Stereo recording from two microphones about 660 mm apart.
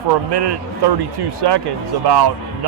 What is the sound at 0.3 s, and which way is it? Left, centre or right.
Speech, right.